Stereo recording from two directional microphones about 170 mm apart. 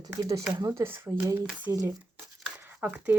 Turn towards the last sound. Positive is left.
turn(degrees=-10)  # may be behind; listen again after turning